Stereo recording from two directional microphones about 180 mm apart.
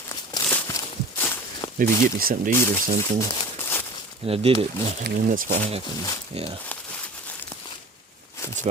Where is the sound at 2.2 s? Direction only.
55° right (ahead or behind).